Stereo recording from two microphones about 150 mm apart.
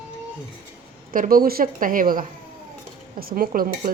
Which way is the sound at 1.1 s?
70° right (ahead or behind).